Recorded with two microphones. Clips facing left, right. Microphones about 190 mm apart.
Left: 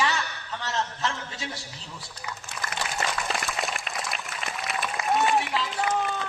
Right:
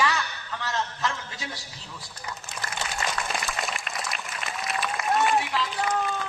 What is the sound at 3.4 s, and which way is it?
Applause, centre (ahead or behind).